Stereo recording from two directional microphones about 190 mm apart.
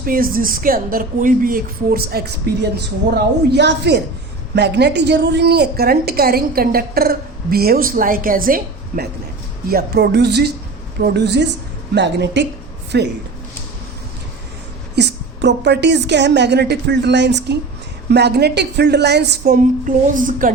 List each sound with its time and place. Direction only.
0.0 s a woman's voice: 50° right (ahead or behind)
14.9 s a woman's voice: 65° right (ahead or behind)
20.1 s a woman's voice: 45° right (ahead or behind)